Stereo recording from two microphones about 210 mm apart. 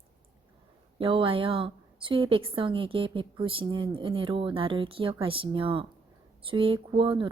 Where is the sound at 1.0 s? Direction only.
25° right (ahead or behind).